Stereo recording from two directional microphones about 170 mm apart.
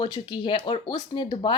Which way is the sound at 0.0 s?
30° left (ahead or behind).